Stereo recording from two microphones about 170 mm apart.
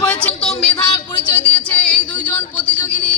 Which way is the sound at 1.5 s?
5° left (ahead or behind).